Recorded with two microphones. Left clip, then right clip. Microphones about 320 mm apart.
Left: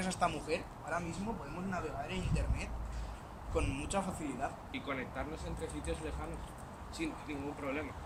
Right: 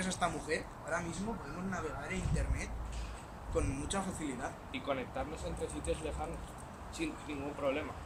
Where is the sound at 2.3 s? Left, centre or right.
Centre.